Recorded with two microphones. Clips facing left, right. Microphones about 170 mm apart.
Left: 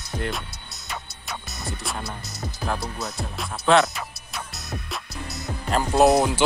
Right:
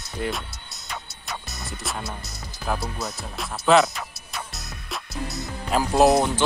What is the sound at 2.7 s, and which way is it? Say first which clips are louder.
Speech: right 3 dB; centre (ahead or behind).